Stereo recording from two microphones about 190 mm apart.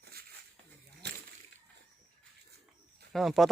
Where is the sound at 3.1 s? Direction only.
Centre (ahead or behind).